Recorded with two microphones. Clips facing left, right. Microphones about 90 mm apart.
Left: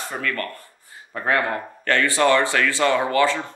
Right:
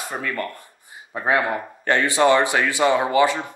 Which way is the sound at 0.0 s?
15° right (ahead or behind).